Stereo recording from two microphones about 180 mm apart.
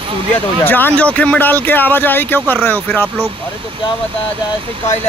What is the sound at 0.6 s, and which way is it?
Speech, 10° left (ahead or behind).